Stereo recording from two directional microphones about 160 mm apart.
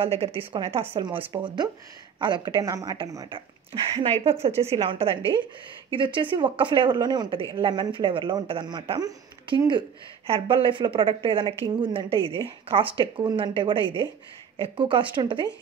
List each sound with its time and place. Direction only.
0.0 s a woman's voice: 35° right (ahead or behind)